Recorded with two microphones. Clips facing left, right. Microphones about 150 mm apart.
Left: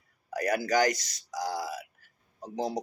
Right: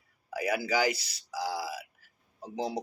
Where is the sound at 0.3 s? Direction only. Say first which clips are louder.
Left 2 dB; 5° right (ahead or behind).